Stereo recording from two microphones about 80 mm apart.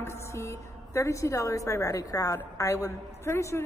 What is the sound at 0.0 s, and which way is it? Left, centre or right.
A woman's voice, left.